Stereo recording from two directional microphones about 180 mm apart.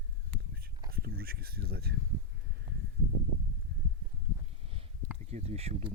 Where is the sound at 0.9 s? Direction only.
55° right (ahead or behind).